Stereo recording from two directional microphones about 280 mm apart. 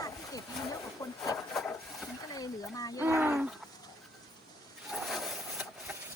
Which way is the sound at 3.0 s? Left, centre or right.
Centre.